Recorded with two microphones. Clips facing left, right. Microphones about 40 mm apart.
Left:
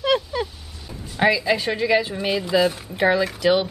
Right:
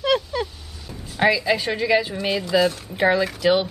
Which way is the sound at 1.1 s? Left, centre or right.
Centre.